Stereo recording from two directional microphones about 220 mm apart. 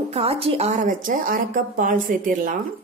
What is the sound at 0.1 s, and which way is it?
Speech, 25° right (ahead or behind).